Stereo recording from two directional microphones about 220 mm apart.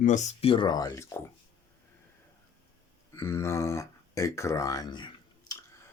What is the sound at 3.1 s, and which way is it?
Speech, 15° left (ahead or behind).